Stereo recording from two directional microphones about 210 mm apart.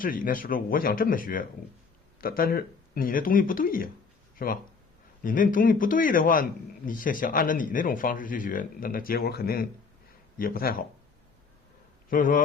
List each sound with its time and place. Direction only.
0.0 s a man's voice: 40° left (ahead or behind)
12.1 s a man's voice: 40° left (ahead or behind)